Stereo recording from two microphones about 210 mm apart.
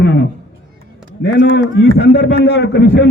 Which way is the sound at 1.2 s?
55° left (ahead or behind).